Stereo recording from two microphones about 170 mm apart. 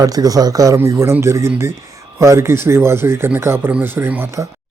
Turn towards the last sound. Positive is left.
turn(degrees=-15)  # may be behind; listen again after turning